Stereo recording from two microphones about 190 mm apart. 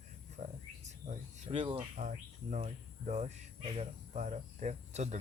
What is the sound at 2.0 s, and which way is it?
Speech, 40° right (ahead or behind).